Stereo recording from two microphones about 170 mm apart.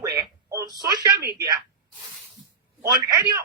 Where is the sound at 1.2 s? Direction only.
70° right (ahead or behind).